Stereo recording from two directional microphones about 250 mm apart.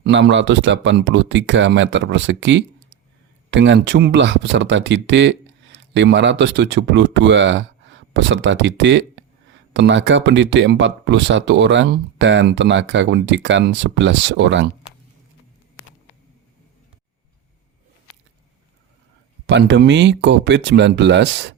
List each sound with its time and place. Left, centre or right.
0.0 s speech: right
19.5 s speech: right